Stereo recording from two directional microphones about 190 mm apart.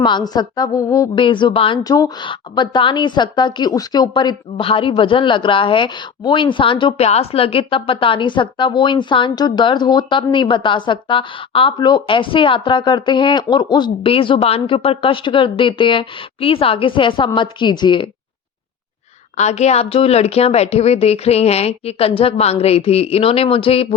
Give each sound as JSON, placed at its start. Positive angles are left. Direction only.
{"t": 0.0, "sound": "a woman's voice", "side_deg": 25}
{"t": 19.4, "sound": "a woman's voice", "side_deg": 35}